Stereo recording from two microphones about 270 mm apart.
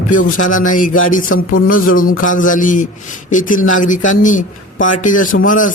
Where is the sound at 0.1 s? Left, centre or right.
Left.